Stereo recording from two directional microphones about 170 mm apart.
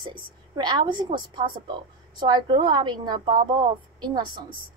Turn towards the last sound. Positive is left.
turn(degrees=-25)  # may be behind; listen again after turning